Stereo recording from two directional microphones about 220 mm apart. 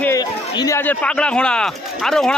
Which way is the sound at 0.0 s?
15° left (ahead or behind).